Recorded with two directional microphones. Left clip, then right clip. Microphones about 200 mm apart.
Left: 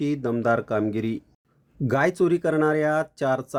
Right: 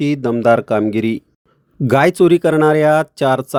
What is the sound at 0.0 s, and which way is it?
Speech, 40° right (ahead or behind).